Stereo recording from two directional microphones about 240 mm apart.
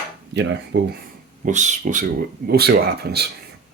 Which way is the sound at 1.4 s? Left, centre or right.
Right.